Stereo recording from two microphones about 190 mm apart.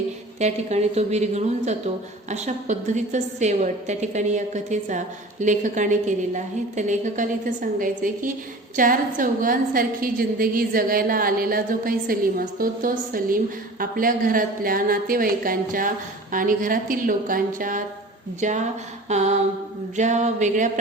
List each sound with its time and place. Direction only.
0.3 s a woman's voice: 35° right (ahead or behind)